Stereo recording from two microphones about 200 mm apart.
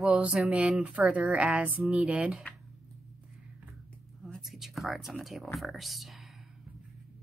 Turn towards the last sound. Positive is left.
turn(degrees=0)  # may be behind; listen again after turning